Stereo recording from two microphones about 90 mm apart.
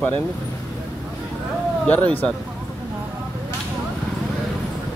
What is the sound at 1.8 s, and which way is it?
Speech, 15° left (ahead or behind).